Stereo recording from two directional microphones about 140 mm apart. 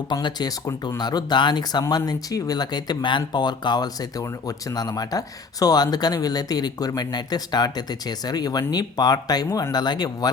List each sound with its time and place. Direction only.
0.1 s speech: 30° left (ahead or behind)